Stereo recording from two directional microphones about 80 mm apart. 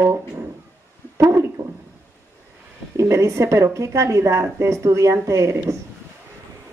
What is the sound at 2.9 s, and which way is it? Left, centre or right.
A woman's voice, right.